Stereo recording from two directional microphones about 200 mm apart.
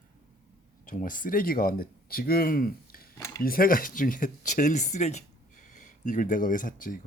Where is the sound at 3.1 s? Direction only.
15° left (ahead or behind).